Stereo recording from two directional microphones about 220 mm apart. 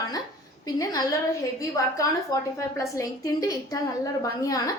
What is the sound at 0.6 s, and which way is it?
A woman's voice, 15° left (ahead or behind).